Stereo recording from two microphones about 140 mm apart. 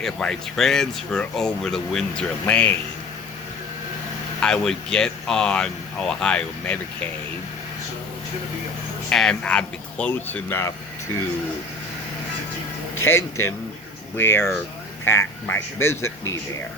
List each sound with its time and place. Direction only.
0.0 s speech: 5° left (ahead or behind)
4.4 s speech: 5° left (ahead or behind)
9.0 s speech: 5° left (ahead or behind)
13.0 s speech: 20° left (ahead or behind)